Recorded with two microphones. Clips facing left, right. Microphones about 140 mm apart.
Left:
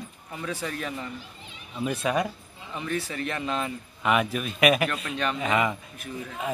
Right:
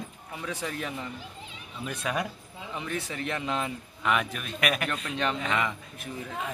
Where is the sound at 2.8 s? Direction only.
20° right (ahead or behind).